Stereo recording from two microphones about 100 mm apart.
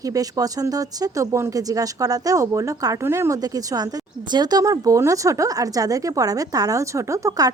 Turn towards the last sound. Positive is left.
turn(degrees=-35)  # may be behind; listen again after turning